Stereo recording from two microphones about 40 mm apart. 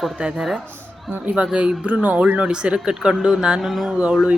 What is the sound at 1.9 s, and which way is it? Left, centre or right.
A woman's voice, right.